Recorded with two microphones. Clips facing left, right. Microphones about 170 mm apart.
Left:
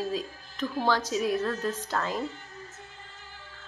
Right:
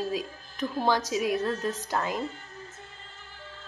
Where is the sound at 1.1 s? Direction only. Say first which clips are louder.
Even; 10° right (ahead or behind).